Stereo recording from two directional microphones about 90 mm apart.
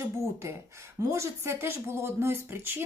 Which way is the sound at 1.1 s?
30° right (ahead or behind).